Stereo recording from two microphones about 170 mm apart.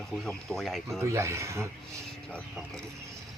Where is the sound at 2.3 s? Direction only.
5° left (ahead or behind).